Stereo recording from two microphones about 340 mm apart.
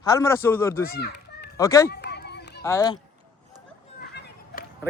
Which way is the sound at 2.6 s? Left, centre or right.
Centre.